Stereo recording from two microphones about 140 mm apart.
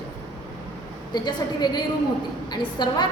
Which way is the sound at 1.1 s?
30° left (ahead or behind).